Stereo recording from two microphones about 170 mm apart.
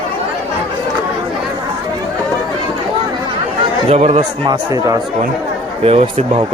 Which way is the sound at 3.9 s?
40° right (ahead or behind).